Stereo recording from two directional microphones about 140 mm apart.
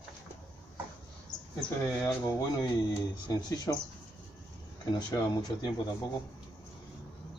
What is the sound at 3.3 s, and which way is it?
Speech, 30° left (ahead or behind).